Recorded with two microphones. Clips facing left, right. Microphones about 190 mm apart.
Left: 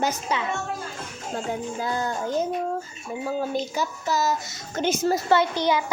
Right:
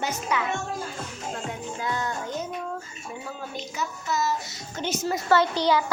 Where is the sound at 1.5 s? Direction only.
35° left (ahead or behind).